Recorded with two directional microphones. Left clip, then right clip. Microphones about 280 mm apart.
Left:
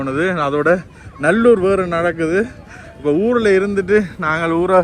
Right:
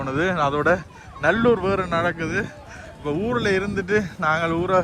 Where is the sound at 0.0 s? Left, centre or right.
Centre.